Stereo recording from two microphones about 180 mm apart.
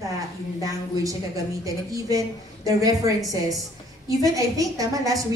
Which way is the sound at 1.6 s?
20° right (ahead or behind).